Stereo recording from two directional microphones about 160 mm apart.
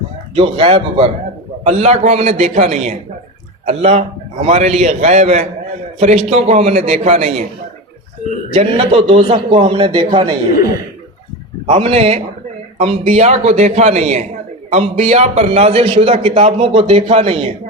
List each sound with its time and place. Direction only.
0.3 s a man's voice: 35° right (ahead or behind)
1.6 s a man's voice: 45° right (ahead or behind)
8.5 s a man's voice: 35° right (ahead or behind)
11.6 s a man's voice: 35° right (ahead or behind)